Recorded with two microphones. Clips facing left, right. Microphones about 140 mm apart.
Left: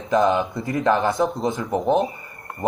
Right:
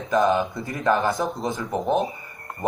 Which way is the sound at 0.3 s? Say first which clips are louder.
Left 1 dB; centre (ahead or behind).